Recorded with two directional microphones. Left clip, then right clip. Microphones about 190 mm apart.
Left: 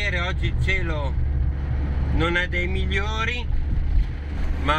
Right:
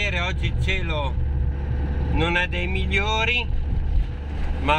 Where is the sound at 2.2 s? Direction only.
15° right (ahead or behind).